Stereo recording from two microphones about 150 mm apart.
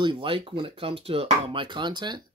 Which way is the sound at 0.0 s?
35° right (ahead or behind).